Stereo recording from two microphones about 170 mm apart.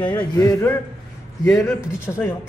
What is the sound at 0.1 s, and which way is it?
A woman's voice, 20° left (ahead or behind).